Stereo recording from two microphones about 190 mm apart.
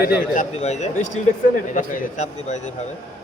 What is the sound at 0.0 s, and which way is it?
Speech, 55° left (ahead or behind).